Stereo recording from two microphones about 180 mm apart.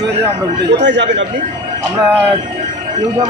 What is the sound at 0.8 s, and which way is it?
Speech, 80° right.